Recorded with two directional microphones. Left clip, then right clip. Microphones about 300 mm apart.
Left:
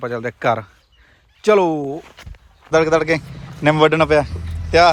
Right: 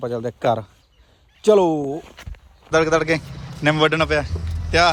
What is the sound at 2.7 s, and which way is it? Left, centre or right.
A man's voice, centre.